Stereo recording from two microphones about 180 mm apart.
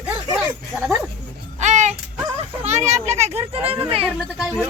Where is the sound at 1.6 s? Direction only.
40° right (ahead or behind).